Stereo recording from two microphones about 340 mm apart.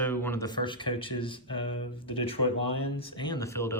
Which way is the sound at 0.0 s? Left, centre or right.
Centre.